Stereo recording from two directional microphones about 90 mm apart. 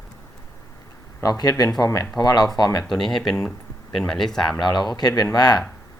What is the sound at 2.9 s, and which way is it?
Speech, 5° left (ahead or behind).